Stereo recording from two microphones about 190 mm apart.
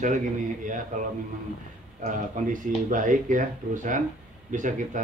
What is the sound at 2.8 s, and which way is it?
A man's voice, 45° right (ahead or behind).